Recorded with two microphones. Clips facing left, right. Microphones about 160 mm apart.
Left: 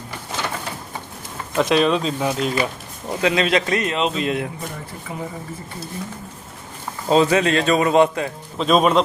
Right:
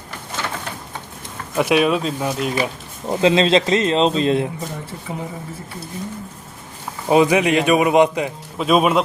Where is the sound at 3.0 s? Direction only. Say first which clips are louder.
Right 4 dB; 25° right (ahead or behind).